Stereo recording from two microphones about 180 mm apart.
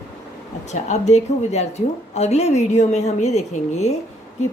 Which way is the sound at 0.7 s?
40° left (ahead or behind).